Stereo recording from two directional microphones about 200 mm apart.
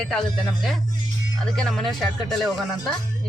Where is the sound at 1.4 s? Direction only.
Centre (ahead or behind).